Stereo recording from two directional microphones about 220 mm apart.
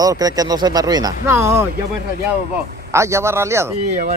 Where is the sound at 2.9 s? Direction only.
15° right (ahead or behind).